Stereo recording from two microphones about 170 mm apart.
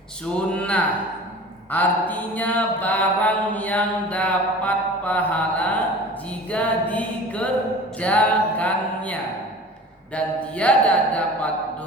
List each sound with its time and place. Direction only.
0.3 s mantra: 10° left (ahead or behind)
10.2 s mantra: 5° left (ahead or behind)